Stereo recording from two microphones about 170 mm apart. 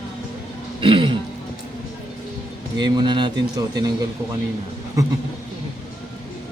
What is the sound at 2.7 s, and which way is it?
Speech, 25° right (ahead or behind).